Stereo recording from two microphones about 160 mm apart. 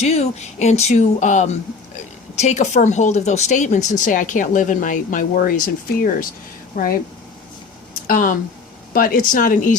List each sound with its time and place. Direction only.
0.0 s speech: 45° left (ahead or behind); by 6.9 s 60° left (ahead or behind)
8.0 s speech: 60° left (ahead or behind)